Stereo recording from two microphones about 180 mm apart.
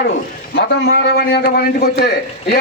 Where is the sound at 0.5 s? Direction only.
65° left (ahead or behind).